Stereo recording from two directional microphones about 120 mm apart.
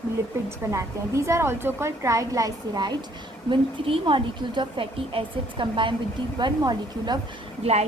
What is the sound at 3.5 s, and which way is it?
A woman's voice, 45° right (ahead or behind).